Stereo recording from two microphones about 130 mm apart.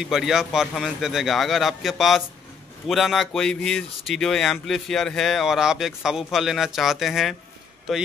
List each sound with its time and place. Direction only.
0.0 s speech: 5° right (ahead or behind)